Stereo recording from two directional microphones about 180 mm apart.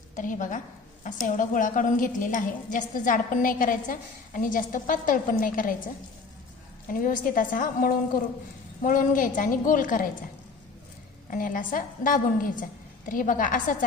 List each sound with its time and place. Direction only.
0.2 s a woman's voice: 45° left (ahead or behind)
7.0 s a woman's voice: 45° left (ahead or behind)
11.3 s a woman's voice: 50° left (ahead or behind)